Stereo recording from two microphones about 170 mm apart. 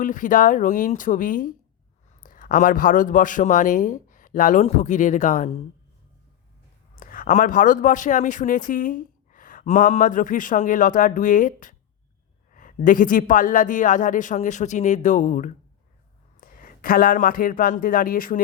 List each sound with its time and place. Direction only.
0.0 s a man's voice: 50° left (ahead or behind)
6.9 s speech: 55° left (ahead or behind)